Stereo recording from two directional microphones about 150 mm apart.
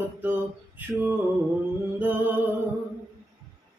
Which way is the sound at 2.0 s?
10° right (ahead or behind).